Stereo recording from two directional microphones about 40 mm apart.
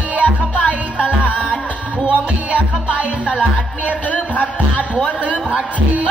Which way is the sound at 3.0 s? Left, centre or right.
Right.